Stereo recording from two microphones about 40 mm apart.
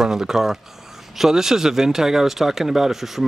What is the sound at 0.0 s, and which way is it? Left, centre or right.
Speech, centre.